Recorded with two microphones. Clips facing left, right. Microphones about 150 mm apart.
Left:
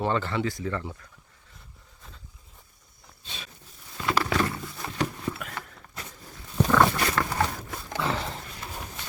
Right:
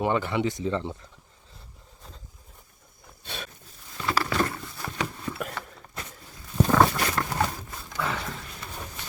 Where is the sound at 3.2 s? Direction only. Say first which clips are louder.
Right 6 dB; 55° right (ahead or behind).